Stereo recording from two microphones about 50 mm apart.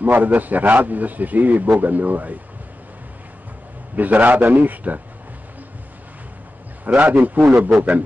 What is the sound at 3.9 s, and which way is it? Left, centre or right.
A man's voice, right.